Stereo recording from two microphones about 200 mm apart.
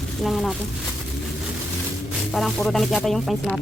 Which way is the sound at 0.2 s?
Centre (ahead or behind).